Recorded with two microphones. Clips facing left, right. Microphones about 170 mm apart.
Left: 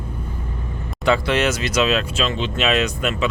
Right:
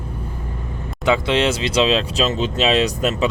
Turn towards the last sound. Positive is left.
turn(degrees=-35)  # may be behind; listen again after turning